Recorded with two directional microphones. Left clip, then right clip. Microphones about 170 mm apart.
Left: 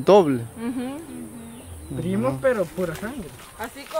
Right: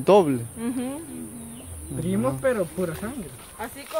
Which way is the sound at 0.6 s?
15° right (ahead or behind).